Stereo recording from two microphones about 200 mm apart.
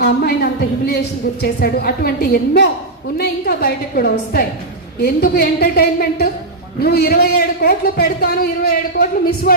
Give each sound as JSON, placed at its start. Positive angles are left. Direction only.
{"t": 0.0, "sound": "speech", "side_deg": 50}